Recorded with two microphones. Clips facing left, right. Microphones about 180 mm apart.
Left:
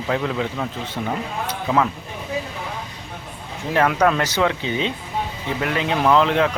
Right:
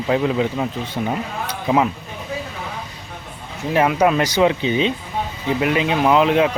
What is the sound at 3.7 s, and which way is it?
Speech, 10° right (ahead or behind).